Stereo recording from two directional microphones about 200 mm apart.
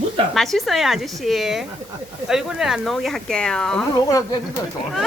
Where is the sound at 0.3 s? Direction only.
Centre (ahead or behind).